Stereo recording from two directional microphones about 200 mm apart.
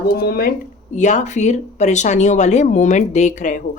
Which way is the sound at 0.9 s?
35° left (ahead or behind).